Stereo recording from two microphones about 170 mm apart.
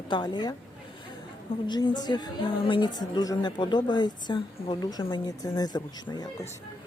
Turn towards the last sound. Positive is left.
turn(degrees=25)  # may be behind; listen again after turning